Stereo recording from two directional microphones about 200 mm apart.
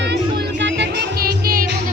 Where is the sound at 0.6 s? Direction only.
60° right (ahead or behind).